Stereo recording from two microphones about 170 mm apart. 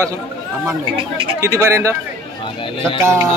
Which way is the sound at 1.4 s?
15° right (ahead or behind).